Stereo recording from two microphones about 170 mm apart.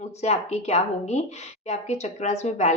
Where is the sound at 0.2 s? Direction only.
40° left (ahead or behind).